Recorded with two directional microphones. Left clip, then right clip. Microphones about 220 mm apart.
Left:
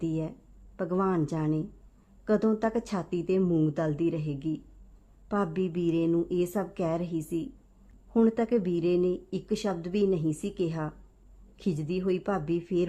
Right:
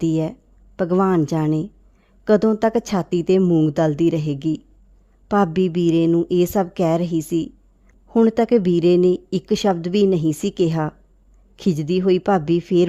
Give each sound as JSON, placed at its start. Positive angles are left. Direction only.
{"t": 0.0, "sound": "a woman's voice", "side_deg": -45}